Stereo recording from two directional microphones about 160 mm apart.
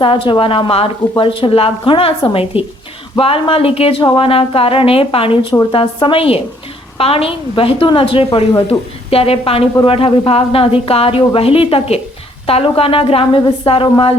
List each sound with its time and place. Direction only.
0.0 s a woman's voice: 35° left (ahead or behind)